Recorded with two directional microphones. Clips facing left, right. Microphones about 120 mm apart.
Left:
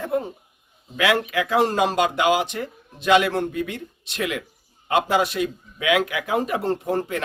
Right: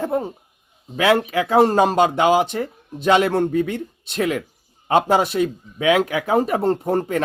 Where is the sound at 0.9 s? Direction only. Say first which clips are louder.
Right 4 dB; 35° right (ahead or behind).